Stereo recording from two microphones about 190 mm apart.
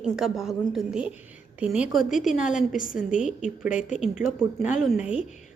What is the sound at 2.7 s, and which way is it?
Speech, 45° left (ahead or behind).